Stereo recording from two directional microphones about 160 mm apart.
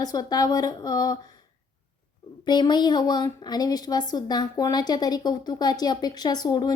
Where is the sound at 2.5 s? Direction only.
30° left (ahead or behind).